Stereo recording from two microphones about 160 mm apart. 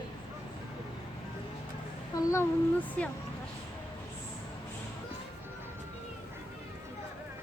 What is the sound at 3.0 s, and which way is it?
Speech, 10° left (ahead or behind).